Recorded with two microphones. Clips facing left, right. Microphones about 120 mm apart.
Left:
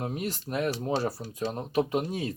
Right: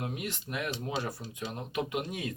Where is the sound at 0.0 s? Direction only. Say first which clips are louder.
Left 4 dB; 35° left (ahead or behind).